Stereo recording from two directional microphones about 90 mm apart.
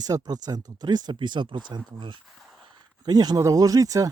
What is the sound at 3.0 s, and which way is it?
Speech, 50° right (ahead or behind).